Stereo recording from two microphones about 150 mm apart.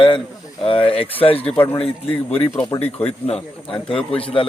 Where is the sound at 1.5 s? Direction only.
15° left (ahead or behind).